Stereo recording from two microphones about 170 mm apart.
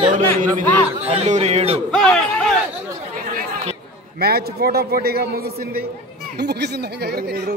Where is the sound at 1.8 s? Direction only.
5° left (ahead or behind).